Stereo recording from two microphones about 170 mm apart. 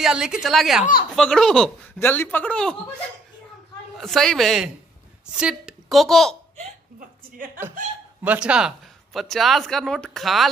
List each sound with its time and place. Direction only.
0.0 s speech: 5° right (ahead or behind)
4.0 s a woman's voice: centre (ahead or behind)
7.0 s a woman's voice: 55° right (ahead or behind)
8.2 s speech: 5° right (ahead or behind)